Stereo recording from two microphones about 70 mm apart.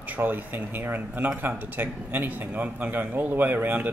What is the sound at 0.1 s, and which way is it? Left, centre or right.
A man's voice, right.